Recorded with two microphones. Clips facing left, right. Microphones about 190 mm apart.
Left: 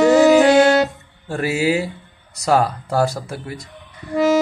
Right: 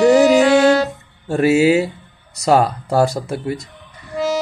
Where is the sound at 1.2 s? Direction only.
25° right (ahead or behind).